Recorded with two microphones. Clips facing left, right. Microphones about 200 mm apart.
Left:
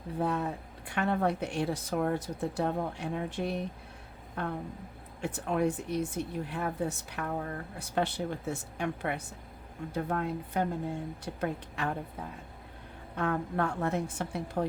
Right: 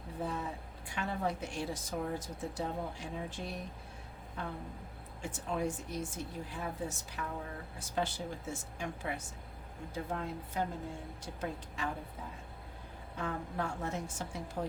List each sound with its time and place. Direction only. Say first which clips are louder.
0.2 s speech: left 7 dB; 65° left (ahead or behind)
13.1 s speech: left 7 dB; 65° left (ahead or behind)